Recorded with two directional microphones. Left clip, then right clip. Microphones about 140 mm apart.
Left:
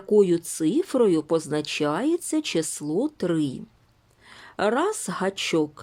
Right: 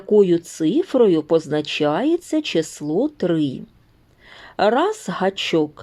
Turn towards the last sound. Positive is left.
turn(degrees=20)  # may be behind; listen again after turning